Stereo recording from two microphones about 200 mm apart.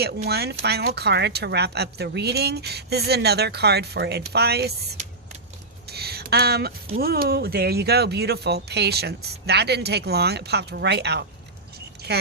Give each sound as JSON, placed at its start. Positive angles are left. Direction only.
{"t": 0.3, "sound": "speech", "side_deg": -55}
{"t": 5.9, "sound": "a sound", "side_deg": -55}
{"t": 7.0, "sound": "a woman's voice", "side_deg": -50}